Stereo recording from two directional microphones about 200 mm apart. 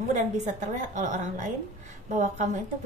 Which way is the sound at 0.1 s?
35° right (ahead or behind).